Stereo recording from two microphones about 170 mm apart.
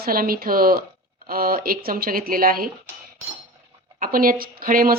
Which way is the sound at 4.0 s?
55° right (ahead or behind).